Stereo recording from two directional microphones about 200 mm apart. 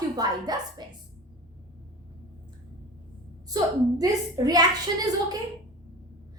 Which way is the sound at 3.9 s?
20° right (ahead or behind).